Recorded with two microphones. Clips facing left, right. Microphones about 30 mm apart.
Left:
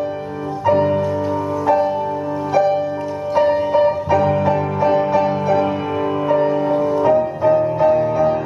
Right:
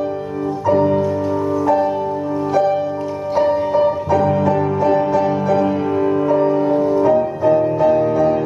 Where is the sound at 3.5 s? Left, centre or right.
Centre.